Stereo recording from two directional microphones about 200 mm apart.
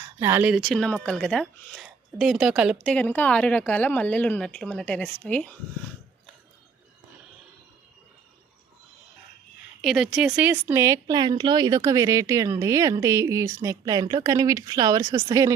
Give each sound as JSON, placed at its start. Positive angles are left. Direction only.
{"t": 0.2, "sound": "speech", "side_deg": -10}
{"t": 9.8, "sound": "speech", "side_deg": 0}